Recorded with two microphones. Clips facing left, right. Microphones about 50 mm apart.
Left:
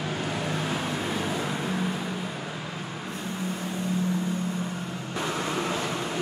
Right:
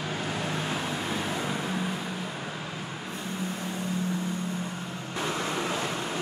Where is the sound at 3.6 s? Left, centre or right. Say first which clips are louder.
Left 2 dB; centre.